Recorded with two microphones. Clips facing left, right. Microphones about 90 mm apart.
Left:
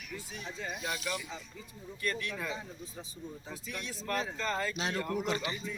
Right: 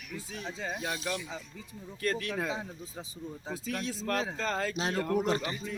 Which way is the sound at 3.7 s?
90° right.